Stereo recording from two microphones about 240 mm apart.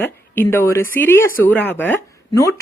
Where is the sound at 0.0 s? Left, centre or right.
Centre.